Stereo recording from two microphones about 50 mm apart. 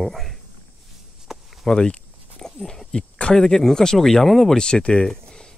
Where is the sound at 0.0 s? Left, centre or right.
Centre.